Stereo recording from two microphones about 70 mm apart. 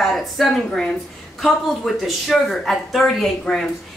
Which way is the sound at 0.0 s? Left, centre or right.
Centre.